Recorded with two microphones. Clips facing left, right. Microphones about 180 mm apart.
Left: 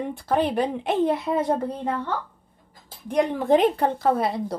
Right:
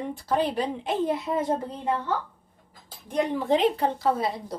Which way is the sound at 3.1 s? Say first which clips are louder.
Left 4 dB; 50° left (ahead or behind).